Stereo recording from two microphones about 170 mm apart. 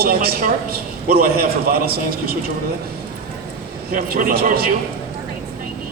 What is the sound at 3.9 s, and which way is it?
Speech, 60° right (ahead or behind).